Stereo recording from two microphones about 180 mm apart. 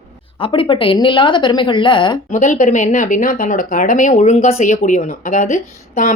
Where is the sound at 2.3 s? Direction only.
45° left (ahead or behind).